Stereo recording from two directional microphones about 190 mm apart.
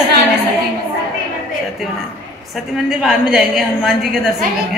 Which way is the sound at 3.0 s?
Centre (ahead or behind).